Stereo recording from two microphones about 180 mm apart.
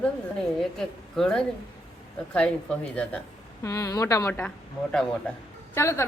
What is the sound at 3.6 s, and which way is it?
A woman's voice, 15° left (ahead or behind).